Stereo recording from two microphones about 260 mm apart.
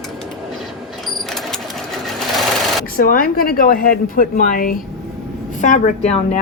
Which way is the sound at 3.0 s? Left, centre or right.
Left.